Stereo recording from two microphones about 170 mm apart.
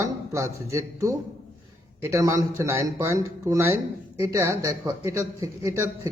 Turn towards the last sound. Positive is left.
turn(degrees=-20)  # may be behind; listen again after turning